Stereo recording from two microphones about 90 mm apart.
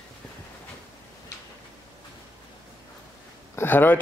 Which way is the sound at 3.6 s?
20° left (ahead or behind).